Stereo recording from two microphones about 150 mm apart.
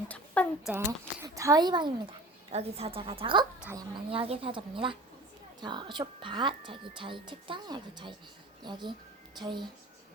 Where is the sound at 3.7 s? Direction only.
25° right (ahead or behind).